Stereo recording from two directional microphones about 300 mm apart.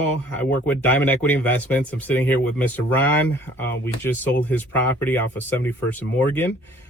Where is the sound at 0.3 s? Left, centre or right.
Centre.